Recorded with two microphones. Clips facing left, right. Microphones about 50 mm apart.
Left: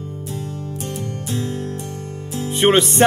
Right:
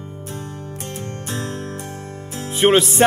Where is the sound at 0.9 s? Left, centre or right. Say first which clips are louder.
Left 1 dB; right.